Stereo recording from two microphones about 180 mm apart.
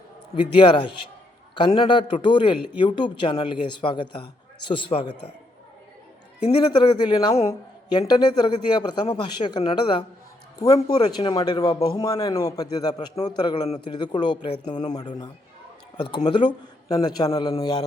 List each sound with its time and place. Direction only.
0.3 s a woman's voice: 25° left (ahead or behind)
6.5 s a woman's voice: 25° left (ahead or behind)